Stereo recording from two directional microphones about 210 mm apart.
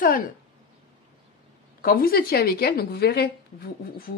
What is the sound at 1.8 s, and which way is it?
Speech, 45° left (ahead or behind).